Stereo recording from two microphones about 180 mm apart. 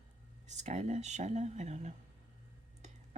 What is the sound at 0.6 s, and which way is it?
Speech, 40° right (ahead or behind).